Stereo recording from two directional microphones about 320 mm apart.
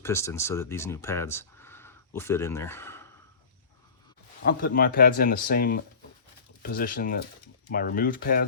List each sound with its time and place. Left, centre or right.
0.0 s speech: centre
4.4 s speech: left